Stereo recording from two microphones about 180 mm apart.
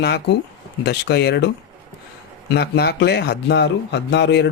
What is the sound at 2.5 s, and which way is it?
A man's voice, 65° left (ahead or behind).